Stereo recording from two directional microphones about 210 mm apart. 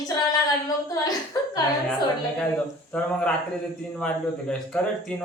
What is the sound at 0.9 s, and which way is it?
Speech, 15° left (ahead or behind).